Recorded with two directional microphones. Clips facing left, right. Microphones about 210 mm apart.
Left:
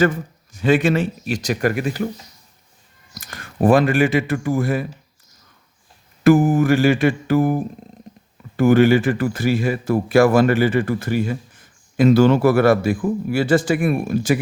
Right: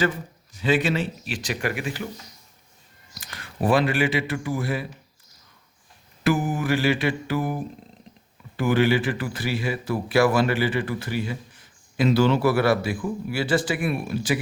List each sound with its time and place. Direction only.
0.5 s speech: 50° left (ahead or behind)
3.2 s speech: 45° left (ahead or behind)
6.2 s speech: 45° left (ahead or behind)